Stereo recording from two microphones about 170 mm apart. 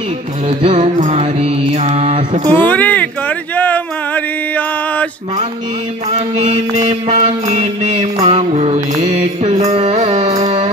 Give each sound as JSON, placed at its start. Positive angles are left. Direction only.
{"t": 0.5, "sound": "mantra", "side_deg": -35}
{"t": 2.5, "sound": "a sound", "side_deg": 10}
{"t": 6.0, "sound": "mantra", "side_deg": -40}